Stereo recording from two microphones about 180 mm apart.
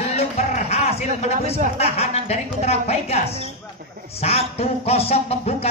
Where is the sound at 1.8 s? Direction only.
35° left (ahead or behind).